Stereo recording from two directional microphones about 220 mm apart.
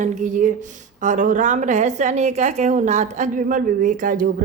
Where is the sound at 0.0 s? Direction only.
35° right (ahead or behind).